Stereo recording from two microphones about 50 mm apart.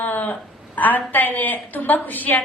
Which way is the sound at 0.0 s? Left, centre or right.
Left.